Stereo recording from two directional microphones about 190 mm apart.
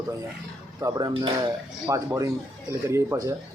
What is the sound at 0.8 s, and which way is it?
Speech, 20° right (ahead or behind).